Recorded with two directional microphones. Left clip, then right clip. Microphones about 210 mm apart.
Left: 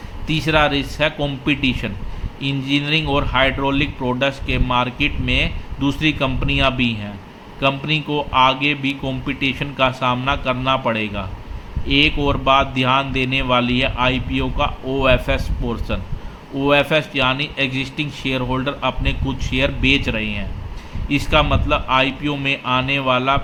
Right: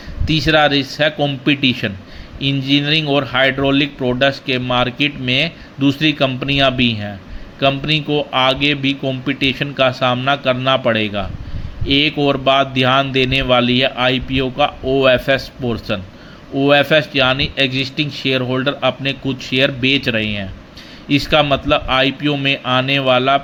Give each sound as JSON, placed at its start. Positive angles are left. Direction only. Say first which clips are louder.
{"t": 0.3, "sound": "a man's voice", "louder": "right 4 dB", "side_deg": -15}